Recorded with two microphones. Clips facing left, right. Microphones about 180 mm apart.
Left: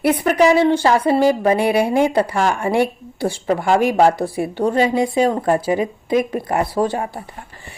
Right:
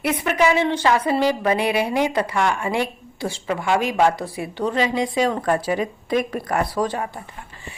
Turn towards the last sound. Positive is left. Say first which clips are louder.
# left 4 dB
turn(degrees=30)  # may be behind; listen again after turning